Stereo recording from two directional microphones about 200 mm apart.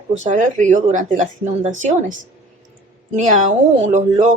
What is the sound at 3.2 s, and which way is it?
Speech, 40° right (ahead or behind).